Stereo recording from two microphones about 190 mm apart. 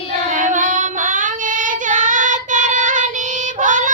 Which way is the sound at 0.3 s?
40° right (ahead or behind).